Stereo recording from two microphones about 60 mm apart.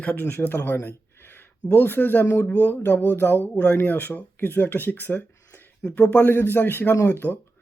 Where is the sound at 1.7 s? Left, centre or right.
Left.